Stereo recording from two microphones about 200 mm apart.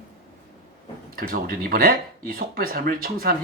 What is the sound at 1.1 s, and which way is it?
Speech, 45° right (ahead or behind).